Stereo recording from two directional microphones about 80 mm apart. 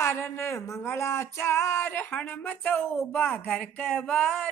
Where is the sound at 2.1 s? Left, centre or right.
Centre.